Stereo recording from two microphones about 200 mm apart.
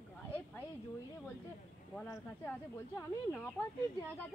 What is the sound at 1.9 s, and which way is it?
Speech, 10° left (ahead or behind).